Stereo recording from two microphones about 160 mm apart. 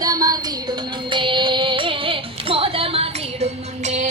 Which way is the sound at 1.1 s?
30° right (ahead or behind).